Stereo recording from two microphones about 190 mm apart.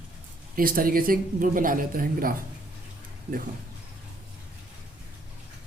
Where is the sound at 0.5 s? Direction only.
50° right (ahead or behind).